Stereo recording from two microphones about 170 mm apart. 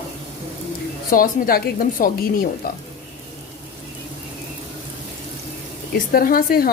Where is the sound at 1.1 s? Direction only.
60° left (ahead or behind).